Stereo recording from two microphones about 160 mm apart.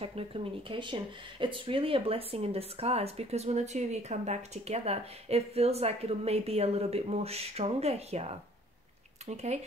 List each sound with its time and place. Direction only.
0.0 s speech: 35° right (ahead or behind)
9.3 s speech: 45° right (ahead or behind)